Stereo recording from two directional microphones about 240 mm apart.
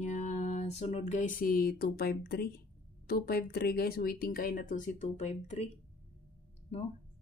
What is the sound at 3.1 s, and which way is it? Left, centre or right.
Speech, left.